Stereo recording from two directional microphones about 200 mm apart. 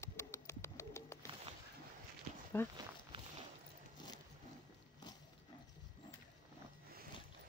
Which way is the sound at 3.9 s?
20° left (ahead or behind).